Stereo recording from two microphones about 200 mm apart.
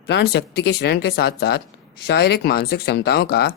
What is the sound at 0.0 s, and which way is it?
Speech, 55° left (ahead or behind).